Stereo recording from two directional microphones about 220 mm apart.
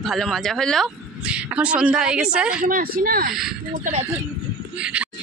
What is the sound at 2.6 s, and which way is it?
Speech, 40° right (ahead or behind).